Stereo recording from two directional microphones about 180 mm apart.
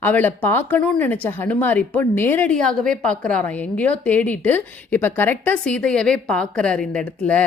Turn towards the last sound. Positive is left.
turn(degrees=5)  # may be behind; listen again after turning